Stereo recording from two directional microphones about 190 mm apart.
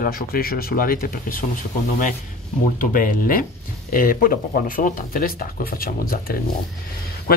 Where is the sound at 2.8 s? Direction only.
45° left (ahead or behind).